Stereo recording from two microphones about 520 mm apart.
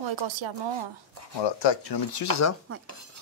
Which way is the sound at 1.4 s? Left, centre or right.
Left.